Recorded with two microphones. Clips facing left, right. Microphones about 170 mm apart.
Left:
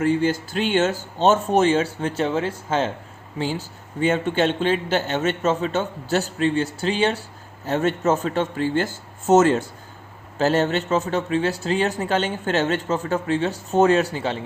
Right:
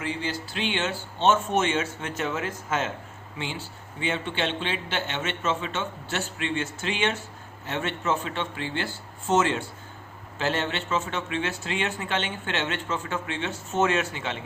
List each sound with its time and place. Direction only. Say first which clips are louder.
0.0 s a man's voice: left 11 dB; 50° left (ahead or behind)